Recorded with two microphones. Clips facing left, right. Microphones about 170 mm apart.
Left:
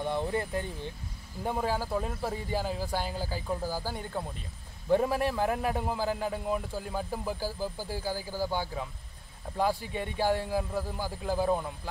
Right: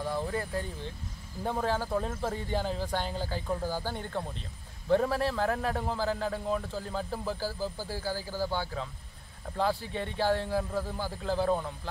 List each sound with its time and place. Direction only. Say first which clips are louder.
0.0 s vehicle: left 2 dB; 20° left (ahead or behind)
1.4 s a man's voice: even; 10° left (ahead or behind)